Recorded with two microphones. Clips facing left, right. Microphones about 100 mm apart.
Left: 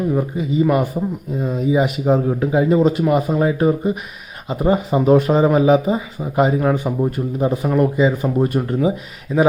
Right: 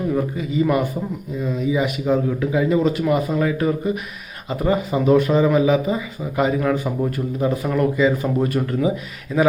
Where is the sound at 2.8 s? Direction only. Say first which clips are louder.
Left 3 dB; 25° left (ahead or behind).